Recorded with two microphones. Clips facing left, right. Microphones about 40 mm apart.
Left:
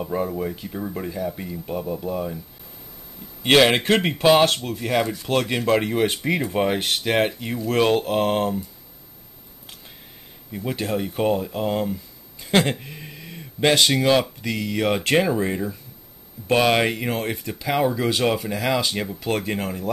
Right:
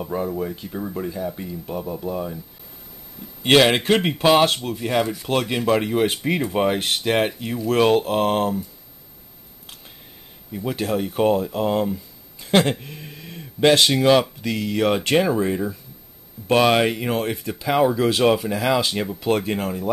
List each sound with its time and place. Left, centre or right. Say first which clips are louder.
0.0 s speech: even; centre
3.4 s speech: right 1 dB; centre
10.6 s speech: right 2 dB; centre
12.7 s a sound: even; centre
13.1 s a sound: right 1 dB; centre
14.1 s speech: right 2 dB; centre